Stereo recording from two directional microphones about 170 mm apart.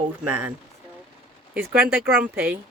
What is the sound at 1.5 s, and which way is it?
Speech, 15° right (ahead or behind).